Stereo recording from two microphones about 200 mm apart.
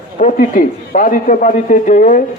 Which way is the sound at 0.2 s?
40° left (ahead or behind).